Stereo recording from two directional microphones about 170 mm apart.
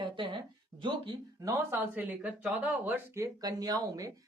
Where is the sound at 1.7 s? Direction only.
10° right (ahead or behind).